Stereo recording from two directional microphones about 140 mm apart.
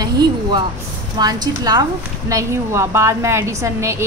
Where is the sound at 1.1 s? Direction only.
30° right (ahead or behind).